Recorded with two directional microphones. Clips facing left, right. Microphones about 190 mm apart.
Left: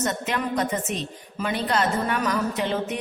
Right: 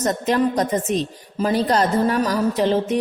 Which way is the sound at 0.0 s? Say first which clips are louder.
Right 7 dB; 35° right (ahead or behind).